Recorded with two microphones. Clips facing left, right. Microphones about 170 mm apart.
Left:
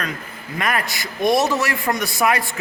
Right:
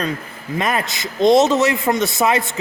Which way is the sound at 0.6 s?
25° right (ahead or behind).